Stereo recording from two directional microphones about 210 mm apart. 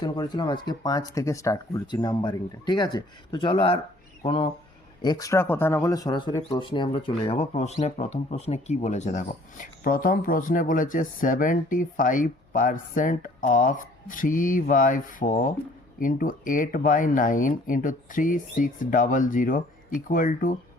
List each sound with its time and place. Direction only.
0.0 s speech: 20° left (ahead or behind); by 20.6 s 40° left (ahead or behind)